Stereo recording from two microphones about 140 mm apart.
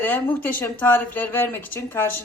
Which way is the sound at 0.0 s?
15° left (ahead or behind).